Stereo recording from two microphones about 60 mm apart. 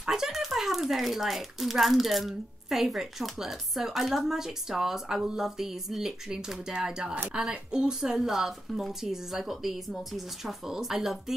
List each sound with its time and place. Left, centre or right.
0.0 s a woman's voice: centre